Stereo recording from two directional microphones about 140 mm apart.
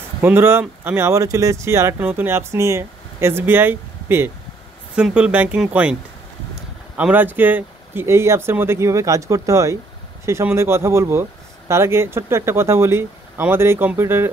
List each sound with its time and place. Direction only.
0.2 s speech: 15° right (ahead or behind)
7.0 s speech: 10° right (ahead or behind)